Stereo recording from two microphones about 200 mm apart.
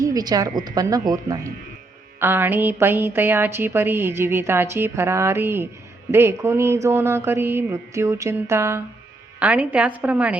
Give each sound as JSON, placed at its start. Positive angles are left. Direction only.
{"t": 0.0, "sound": "a woman's voice", "side_deg": -20}